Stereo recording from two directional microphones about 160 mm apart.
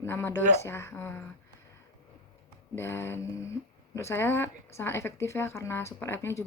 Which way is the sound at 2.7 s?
15° left (ahead or behind).